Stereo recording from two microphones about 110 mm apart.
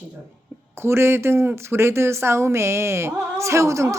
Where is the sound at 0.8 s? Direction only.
25° right (ahead or behind).